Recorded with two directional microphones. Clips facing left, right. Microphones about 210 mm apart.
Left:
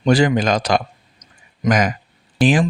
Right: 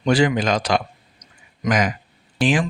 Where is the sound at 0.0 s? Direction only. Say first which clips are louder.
Left 3 dB; 40° left (ahead or behind).